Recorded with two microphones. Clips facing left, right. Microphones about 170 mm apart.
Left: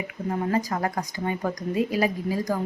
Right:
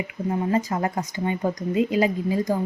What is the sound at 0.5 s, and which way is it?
Speech, 25° right (ahead or behind).